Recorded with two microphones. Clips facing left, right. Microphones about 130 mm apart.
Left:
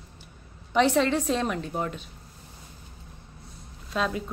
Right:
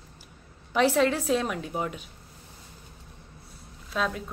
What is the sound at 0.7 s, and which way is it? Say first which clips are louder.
A woman's voice: left 1 dB; 5° right (ahead or behind).